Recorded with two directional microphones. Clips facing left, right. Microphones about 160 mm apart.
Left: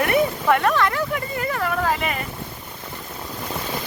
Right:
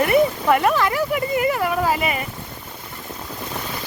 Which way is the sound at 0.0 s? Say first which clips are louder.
Right 3 dB; 5° right (ahead or behind).